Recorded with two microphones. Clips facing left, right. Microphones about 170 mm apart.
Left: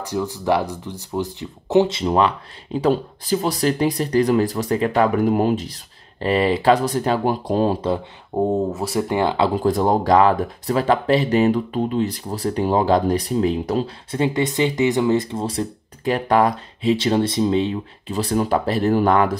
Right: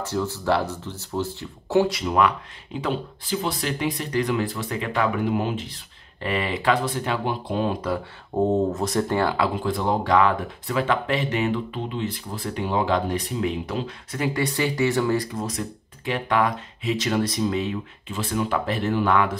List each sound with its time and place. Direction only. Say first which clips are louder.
0.0 s speech: left 2 dB; 15° left (ahead or behind); by 8.0 s 30° left (ahead or behind)
8.4 s speech: left 1 dB; 10° left (ahead or behind)
9.4 s speech: left 6 dB; 40° left (ahead or behind)